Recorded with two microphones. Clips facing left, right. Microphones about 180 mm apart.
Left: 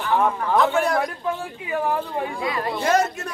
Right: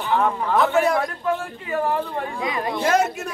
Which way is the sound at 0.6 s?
Centre (ahead or behind).